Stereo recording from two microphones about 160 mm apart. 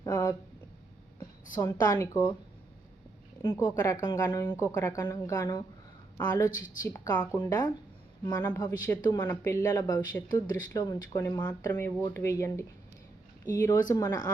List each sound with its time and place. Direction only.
0.0 s a sound: 25° left (ahead or behind)
1.6 s speech: 20° left (ahead or behind)
3.4 s speech: 30° left (ahead or behind)